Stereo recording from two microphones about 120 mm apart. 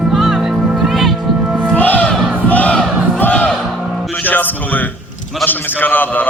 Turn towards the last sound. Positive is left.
turn(degrees=15)  # may be behind; listen again after turning